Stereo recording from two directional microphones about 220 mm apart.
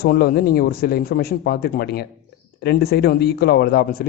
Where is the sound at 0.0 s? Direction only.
45° left (ahead or behind).